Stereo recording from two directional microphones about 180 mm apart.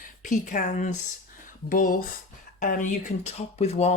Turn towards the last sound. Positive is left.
turn(degrees=35)  # may be behind; listen again after turning